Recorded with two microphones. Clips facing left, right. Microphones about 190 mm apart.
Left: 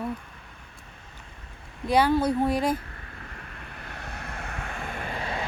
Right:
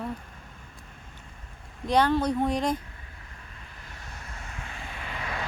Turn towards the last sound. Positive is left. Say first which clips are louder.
# left 3 dB
turn(degrees=30)  # may be behind; listen again after turning